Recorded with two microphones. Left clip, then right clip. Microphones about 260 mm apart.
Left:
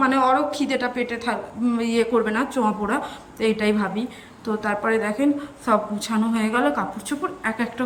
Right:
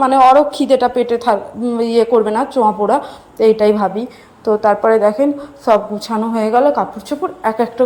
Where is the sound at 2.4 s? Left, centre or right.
Centre.